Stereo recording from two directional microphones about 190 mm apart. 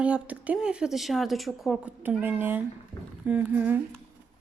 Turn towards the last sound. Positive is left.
turn(degrees=-10)  # may be behind; listen again after turning